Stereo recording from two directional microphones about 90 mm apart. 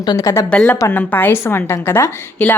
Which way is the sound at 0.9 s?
20° left (ahead or behind).